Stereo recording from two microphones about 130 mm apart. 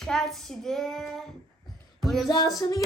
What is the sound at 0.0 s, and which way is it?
Child singing, centre (ahead or behind).